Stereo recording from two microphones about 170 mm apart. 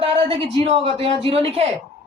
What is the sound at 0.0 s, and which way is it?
A man's voice, 35° right (ahead or behind).